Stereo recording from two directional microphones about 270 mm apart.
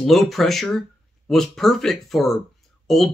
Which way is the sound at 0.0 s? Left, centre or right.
Centre.